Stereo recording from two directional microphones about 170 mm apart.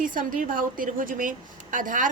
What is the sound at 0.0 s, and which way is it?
A woman's voice, 55° right (ahead or behind).